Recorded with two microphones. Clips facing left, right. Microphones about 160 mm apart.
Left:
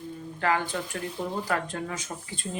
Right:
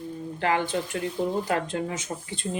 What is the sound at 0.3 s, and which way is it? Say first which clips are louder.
Speech: right 2 dB; 25° right (ahead or behind).